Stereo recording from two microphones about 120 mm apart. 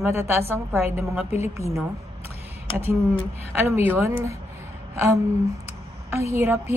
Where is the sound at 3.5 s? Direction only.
20° right (ahead or behind).